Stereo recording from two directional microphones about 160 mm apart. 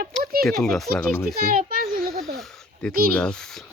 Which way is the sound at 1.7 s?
65° right (ahead or behind).